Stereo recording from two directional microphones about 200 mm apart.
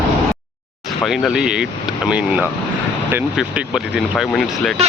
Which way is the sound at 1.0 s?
Centre (ahead or behind).